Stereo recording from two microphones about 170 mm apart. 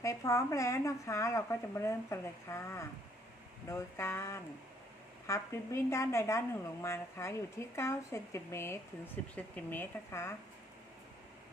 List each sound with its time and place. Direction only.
0.0 s speech: 15° left (ahead or behind)